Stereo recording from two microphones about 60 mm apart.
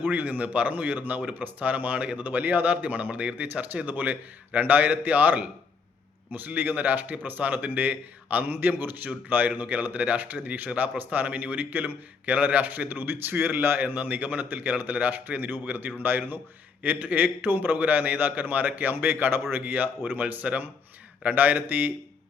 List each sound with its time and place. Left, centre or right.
0.0 s a man's voice: right